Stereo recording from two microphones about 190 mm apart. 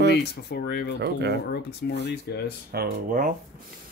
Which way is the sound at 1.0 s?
60° right (ahead or behind).